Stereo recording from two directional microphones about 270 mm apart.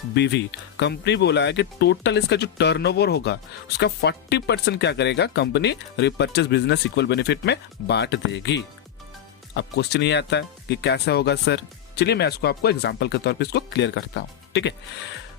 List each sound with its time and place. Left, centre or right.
0.1 s speech: left